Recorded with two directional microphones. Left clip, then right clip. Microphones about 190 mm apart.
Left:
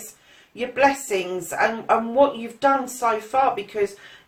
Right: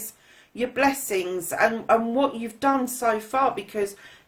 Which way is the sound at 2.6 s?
55° right (ahead or behind).